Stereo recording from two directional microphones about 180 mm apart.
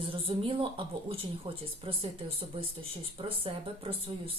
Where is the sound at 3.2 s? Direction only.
30° right (ahead or behind).